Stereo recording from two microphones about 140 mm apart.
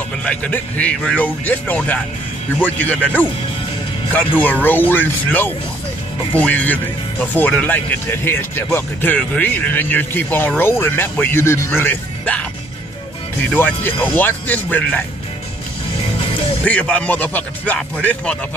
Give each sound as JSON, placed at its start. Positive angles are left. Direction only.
{"t": 0.2, "sound": "speech", "side_deg": 10}
{"t": 16.6, "sound": "speech", "side_deg": 10}